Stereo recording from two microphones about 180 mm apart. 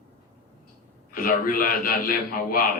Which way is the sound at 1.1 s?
55° left (ahead or behind).